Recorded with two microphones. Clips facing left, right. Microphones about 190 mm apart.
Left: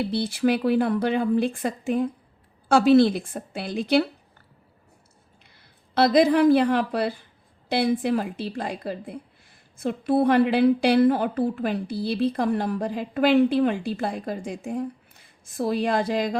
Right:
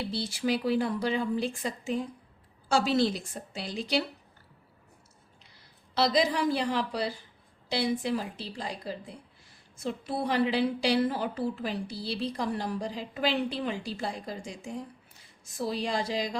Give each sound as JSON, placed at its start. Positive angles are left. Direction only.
{"t": 0.0, "sound": "a woman's voice", "side_deg": 60}
{"t": 5.9, "sound": "a woman's voice", "side_deg": 55}